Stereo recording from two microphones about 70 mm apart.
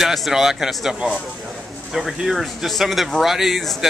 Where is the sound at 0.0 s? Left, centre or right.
Centre.